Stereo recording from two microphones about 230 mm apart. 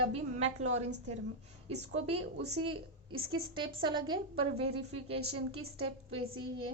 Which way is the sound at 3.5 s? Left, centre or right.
Right.